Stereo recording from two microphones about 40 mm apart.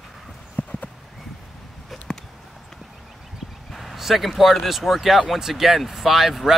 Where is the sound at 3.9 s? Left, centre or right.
Centre.